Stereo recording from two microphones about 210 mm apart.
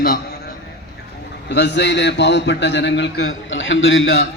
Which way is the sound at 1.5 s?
55° left (ahead or behind).